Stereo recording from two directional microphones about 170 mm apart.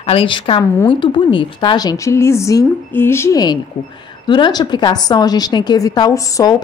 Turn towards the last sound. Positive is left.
turn(degrees=20)  # may be behind; listen again after turning